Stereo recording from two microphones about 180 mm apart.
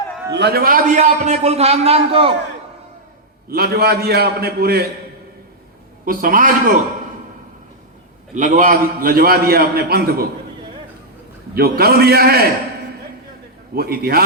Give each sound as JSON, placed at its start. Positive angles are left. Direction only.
{"t": 0.3, "sound": "a man's voice", "side_deg": -60}
{"t": 3.5, "sound": "a man's voice", "side_deg": -60}
{"t": 6.1, "sound": "a man's voice", "side_deg": -50}
{"t": 8.4, "sound": "a man's voice", "side_deg": -45}
{"t": 11.5, "sound": "a man's voice", "side_deg": -60}
{"t": 13.7, "sound": "a man's voice", "side_deg": -60}